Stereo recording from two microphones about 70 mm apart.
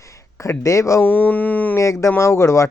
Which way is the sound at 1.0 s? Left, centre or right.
Left.